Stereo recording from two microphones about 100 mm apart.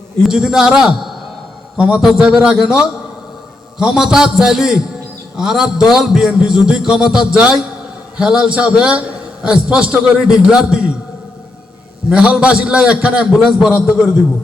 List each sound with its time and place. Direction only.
0.2 s a man's voice: 5° right (ahead or behind)
12.1 s a man's voice: 10° right (ahead or behind)